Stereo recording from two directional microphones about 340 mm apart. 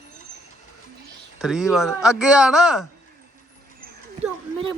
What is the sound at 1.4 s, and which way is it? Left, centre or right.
A man's voice, centre.